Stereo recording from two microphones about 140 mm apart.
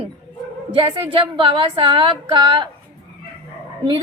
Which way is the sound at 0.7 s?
40° right (ahead or behind).